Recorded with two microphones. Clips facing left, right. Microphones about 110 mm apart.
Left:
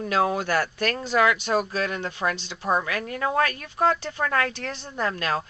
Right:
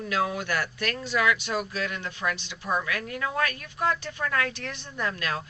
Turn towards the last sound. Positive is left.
turn(degrees=35)  # may be behind; listen again after turning